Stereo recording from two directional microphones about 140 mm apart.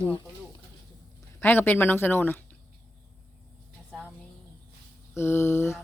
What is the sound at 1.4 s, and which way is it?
Speech, 15° left (ahead or behind).